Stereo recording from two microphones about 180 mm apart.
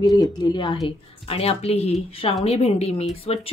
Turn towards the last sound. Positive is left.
turn(degrees=35)  # may be behind; listen again after turning